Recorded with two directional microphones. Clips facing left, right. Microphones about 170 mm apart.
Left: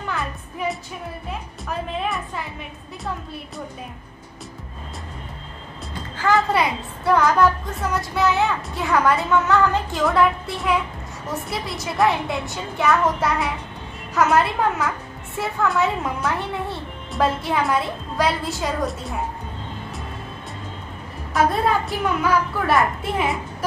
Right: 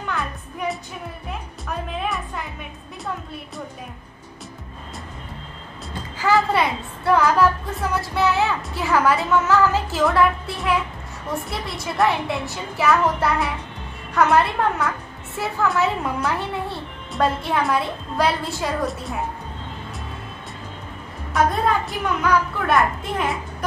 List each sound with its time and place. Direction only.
0.1 s music: centre (ahead or behind)
6.1 s a woman's voice: 5° right (ahead or behind)
21.3 s a woman's voice: centre (ahead or behind)